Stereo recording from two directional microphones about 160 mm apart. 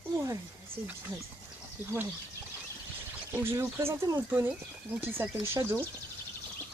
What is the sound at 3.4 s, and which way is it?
Speech, 15° right (ahead or behind).